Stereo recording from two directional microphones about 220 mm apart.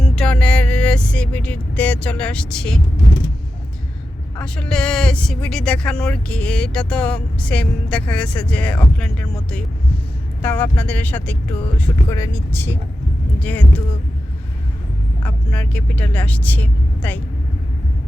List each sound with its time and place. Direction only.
0.0 s vehicle: 5° left (ahead or behind)
4.4 s speech: 5° left (ahead or behind)
15.2 s speech: 5° left (ahead or behind)